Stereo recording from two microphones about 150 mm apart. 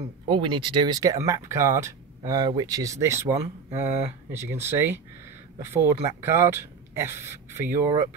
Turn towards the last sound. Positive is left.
turn(degrees=-15)  # may be behind; listen again after turning